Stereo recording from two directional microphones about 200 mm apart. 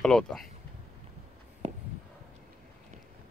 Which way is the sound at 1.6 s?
30° right (ahead or behind).